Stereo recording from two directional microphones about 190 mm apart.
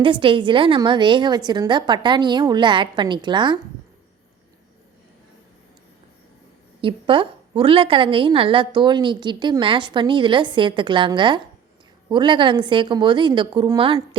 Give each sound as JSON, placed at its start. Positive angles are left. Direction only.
{"t": 0.0, "sound": "a woman's voice", "side_deg": -25}
{"t": 6.8, "sound": "a woman's voice", "side_deg": -25}